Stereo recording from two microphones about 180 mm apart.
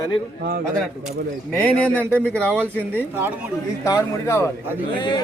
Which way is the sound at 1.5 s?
5° left (ahead or behind).